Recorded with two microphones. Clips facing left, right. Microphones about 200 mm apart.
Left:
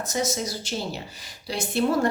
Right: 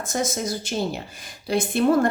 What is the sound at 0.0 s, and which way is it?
A woman's voice, 50° right (ahead or behind).